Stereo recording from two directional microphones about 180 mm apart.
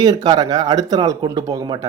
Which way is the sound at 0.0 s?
20° right (ahead or behind).